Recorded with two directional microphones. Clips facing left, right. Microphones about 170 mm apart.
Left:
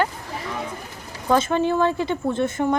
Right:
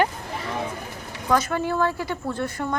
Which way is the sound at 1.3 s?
25° left (ahead or behind).